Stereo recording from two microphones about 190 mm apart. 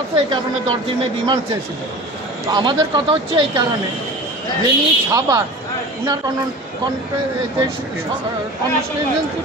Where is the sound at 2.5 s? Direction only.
20° right (ahead or behind).